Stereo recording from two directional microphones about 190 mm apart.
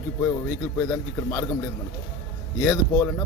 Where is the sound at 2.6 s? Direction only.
15° left (ahead or behind).